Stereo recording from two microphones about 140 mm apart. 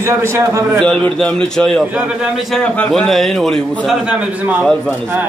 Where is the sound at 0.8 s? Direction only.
5° left (ahead or behind).